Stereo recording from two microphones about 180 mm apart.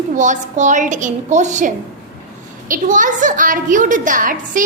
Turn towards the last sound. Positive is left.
turn(degrees=-50)  # may be behind; listen again after turning